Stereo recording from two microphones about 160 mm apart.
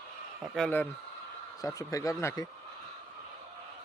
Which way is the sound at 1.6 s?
20° left (ahead or behind).